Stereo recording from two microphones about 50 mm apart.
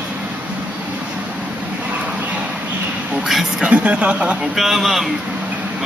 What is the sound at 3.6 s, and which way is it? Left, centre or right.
Speech, right.